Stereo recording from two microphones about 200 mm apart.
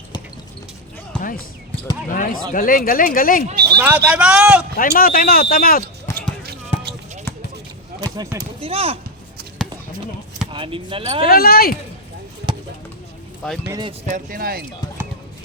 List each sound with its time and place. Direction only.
1.2 s basketball bounce: 45° left (ahead or behind)
2.0 s speech: 45° left (ahead or behind)
3.5 s speech: 50° right (ahead or behind)
3.8 s speech: 5° right (ahead or behind)
4.8 s speech: 45° left (ahead or behind)
6.1 s basketball bounce: 55° right (ahead or behind)
8.0 s speech: 20° right (ahead or behind)
8.6 s speech: 30° right (ahead or behind)
10.5 s speech: 25° right (ahead or behind)
11.3 s speech: 50° left (ahead or behind)
12.5 s a sound: 25° right (ahead or behind)
13.7 s speech: 20° right (ahead or behind)
14.1 s speech: 45° right (ahead or behind)